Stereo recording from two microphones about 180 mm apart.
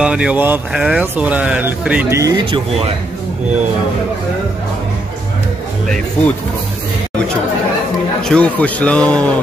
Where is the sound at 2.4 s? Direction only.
30° right (ahead or behind).